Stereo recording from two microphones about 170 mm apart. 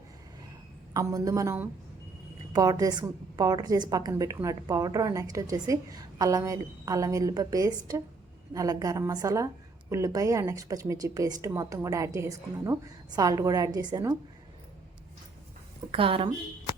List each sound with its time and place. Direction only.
0.9 s a woman's voice: 20° right (ahead or behind)
15.9 s a woman's voice: 30° right (ahead or behind)